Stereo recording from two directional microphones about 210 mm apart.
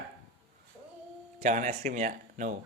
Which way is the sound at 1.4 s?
35° right (ahead or behind).